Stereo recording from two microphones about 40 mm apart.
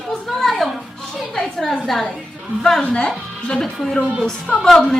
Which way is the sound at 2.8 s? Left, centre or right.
Left.